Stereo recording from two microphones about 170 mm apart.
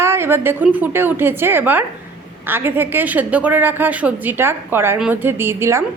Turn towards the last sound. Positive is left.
turn(degrees=-15)  # may be behind; listen again after turning